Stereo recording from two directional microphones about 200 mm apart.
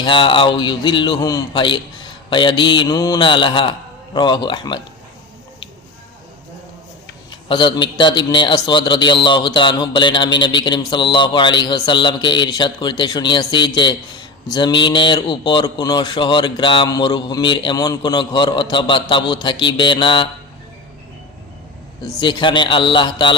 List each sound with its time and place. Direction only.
0.0 s a man's voice: 25° left (ahead or behind)
7.3 s a man's voice: 25° left (ahead or behind)
22.0 s a man's voice: 25° left (ahead or behind)